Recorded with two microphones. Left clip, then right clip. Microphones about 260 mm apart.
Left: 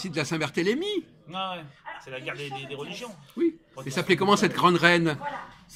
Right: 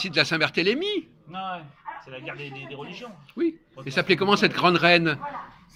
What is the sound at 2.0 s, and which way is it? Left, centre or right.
Speech, centre.